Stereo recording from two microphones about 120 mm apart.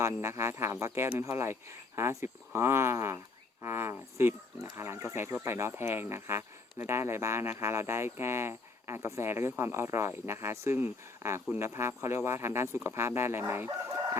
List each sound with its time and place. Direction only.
0.0 s speech: 20° right (ahead or behind)